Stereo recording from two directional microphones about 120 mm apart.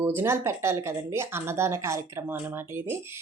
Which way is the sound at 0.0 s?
20° right (ahead or behind).